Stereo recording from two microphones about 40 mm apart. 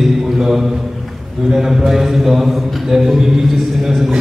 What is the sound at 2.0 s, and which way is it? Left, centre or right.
Mantra, centre.